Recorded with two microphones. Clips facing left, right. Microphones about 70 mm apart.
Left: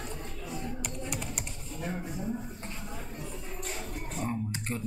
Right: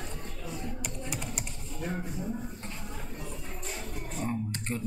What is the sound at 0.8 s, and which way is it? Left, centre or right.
Typing, centre.